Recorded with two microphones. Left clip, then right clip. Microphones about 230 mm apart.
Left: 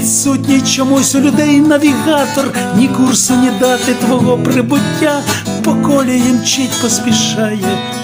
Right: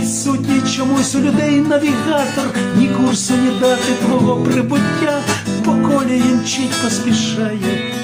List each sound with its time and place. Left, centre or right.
1.1 s speech: left